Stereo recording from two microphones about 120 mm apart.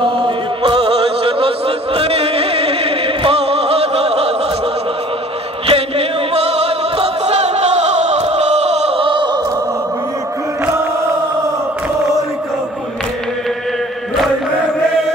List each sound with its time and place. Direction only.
0.7 s music: 55° right (ahead or behind)
5.7 s music: 55° right (ahead or behind); by 9.4 s 40° right (ahead or behind)